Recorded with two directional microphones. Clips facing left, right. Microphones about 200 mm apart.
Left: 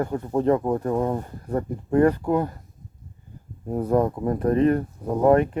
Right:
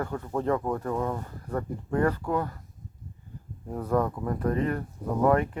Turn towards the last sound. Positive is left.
turn(degrees=25)  # may be behind; listen again after turning